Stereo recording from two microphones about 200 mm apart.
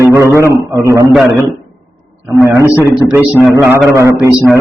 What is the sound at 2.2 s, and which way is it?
A man's voice, 10° right (ahead or behind).